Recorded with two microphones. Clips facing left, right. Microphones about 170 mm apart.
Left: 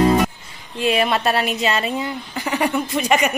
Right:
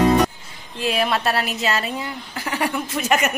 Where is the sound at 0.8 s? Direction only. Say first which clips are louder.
Left 3 dB; centre (ahead or behind).